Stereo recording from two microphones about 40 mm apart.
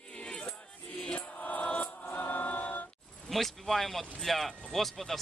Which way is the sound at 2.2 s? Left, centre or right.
Left.